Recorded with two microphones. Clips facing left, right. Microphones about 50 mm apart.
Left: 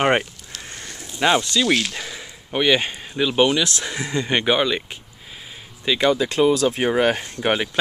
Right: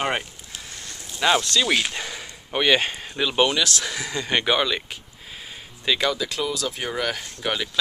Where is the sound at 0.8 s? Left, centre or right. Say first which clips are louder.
Left 2 dB; centre.